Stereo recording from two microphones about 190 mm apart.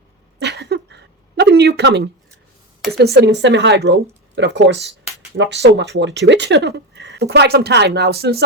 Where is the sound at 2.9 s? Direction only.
60° right (ahead or behind).